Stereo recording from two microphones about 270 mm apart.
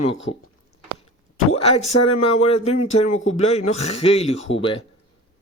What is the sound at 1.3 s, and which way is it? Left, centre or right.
Speech, left.